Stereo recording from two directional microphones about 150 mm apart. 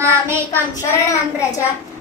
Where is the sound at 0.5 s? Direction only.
20° left (ahead or behind).